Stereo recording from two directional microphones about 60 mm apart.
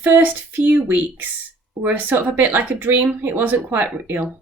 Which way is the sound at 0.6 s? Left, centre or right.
Right.